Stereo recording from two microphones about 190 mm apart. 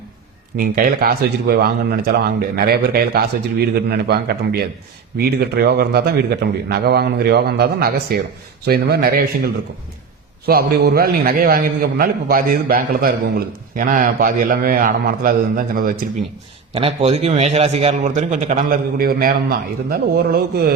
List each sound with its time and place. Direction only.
0.5 s a man's voice: 50° right (ahead or behind)
16.7 s a man's voice: 30° right (ahead or behind); by 20.7 s 50° right (ahead or behind)